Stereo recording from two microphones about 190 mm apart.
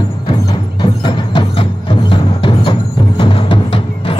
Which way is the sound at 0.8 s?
25° left (ahead or behind).